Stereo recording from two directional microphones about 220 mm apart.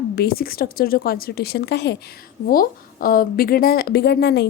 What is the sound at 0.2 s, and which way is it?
A woman's voice, 45° left (ahead or behind).